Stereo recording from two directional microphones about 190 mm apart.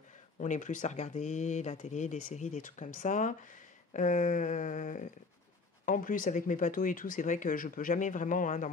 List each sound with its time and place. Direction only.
0.4 s speech: 40° left (ahead or behind)